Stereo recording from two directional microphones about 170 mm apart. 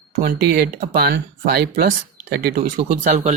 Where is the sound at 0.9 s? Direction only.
70° right (ahead or behind).